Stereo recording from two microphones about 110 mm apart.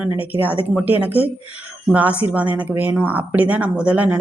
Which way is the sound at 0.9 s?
15° right (ahead or behind).